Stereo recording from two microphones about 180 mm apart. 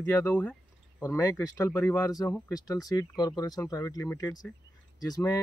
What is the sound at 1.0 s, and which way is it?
Speech, 15° left (ahead or behind).